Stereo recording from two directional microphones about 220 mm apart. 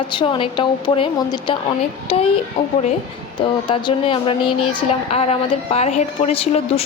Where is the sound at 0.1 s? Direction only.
20° left (ahead or behind).